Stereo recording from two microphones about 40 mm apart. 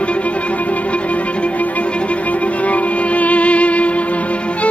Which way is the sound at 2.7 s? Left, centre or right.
Left.